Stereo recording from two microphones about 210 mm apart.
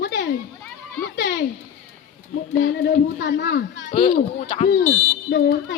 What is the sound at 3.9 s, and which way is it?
Speech, 30° left (ahead or behind).